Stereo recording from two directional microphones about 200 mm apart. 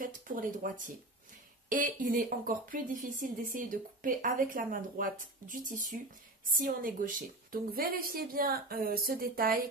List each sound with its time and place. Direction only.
0.0 s speech: 45° right (ahead or behind)
1.7 s a woman's voice: 40° right (ahead or behind)